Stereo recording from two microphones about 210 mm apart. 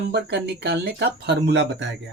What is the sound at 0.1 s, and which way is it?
Speech, 55° right (ahead or behind).